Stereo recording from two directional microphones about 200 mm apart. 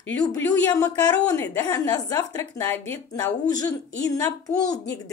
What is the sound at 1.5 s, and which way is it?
A woman's voice, 15° left (ahead or behind).